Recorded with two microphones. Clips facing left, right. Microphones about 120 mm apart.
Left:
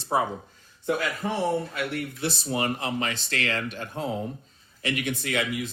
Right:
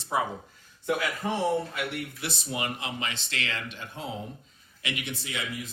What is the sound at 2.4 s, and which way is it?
Speech, 40° left (ahead or behind).